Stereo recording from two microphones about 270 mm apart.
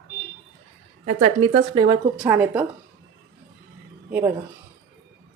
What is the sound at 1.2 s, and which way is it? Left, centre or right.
Speech, right.